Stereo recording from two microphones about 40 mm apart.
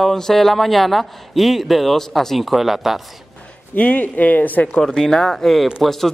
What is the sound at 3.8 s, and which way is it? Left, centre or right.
Speech, left.